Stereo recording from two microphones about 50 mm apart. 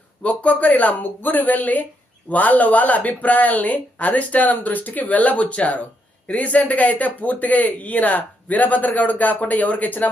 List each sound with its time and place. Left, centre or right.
0.2 s speech: left